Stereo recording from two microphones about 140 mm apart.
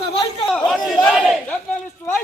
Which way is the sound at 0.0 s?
40° left (ahead or behind).